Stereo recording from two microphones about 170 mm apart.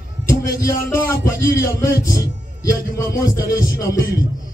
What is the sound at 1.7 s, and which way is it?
Music, 60° left (ahead or behind).